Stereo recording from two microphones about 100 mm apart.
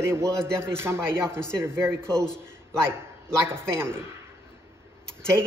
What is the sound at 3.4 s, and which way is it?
Speech, 25° right (ahead or behind).